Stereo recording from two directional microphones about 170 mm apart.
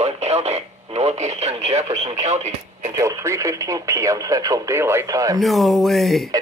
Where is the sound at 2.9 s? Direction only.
15° right (ahead or behind).